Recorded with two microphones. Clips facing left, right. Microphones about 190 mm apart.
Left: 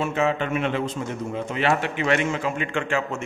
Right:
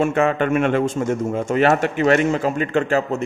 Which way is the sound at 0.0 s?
55° right (ahead or behind).